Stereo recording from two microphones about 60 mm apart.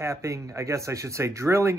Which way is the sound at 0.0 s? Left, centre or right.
Right.